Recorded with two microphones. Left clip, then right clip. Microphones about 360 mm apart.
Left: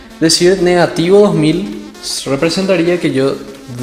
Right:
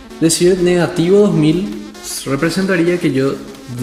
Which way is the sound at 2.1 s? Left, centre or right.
Centre.